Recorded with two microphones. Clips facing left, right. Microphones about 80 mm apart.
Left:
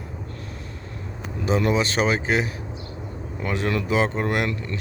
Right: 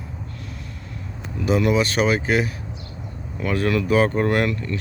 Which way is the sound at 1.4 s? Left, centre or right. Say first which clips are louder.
Right 2 dB; left.